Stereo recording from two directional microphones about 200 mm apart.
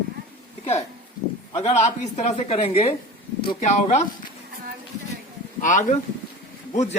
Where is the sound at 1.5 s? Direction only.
30° left (ahead or behind).